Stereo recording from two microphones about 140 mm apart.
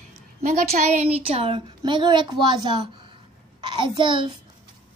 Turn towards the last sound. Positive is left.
turn(degrees=-35)  # may be behind; listen again after turning